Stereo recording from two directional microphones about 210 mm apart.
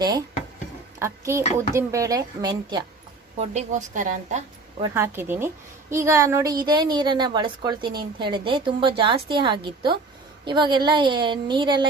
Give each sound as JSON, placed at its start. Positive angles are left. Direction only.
{"t": 0.0, "sound": "a woman's voice", "side_deg": -20}
{"t": 3.5, "sound": "a woman's voice", "side_deg": -35}
{"t": 4.8, "sound": "a woman's voice", "side_deg": -10}